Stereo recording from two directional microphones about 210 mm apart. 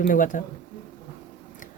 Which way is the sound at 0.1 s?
40° left (ahead or behind).